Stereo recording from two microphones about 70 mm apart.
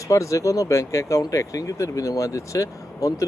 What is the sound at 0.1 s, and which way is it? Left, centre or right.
Speech, left.